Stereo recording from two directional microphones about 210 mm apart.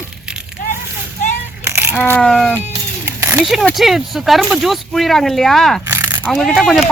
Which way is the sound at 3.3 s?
5° left (ahead or behind).